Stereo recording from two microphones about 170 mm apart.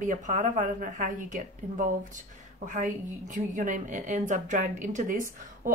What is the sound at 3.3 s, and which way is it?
Speech, 50° right (ahead or behind).